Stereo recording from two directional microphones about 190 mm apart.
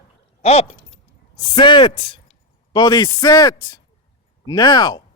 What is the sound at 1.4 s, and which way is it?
Speech, 25° left (ahead or behind).